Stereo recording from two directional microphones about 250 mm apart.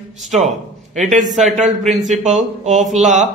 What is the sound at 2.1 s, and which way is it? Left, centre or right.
A man's voice, right.